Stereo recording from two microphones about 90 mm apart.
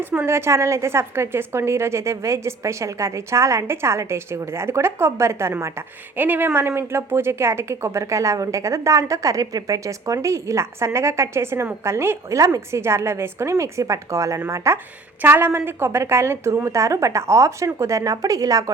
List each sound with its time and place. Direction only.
0.3 s a woman's voice: 30° right (ahead or behind)